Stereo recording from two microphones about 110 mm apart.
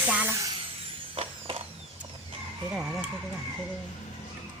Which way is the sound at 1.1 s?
60° right (ahead or behind).